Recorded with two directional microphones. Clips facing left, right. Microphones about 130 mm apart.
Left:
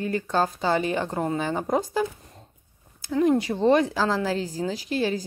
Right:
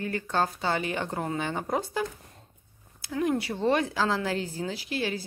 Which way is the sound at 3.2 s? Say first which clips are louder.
Left 6 dB; 20° left (ahead or behind).